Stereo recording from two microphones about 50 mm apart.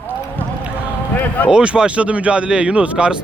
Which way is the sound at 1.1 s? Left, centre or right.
Left.